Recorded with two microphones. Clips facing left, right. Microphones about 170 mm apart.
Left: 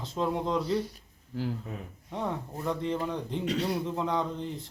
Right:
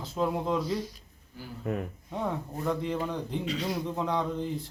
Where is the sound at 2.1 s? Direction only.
Centre (ahead or behind).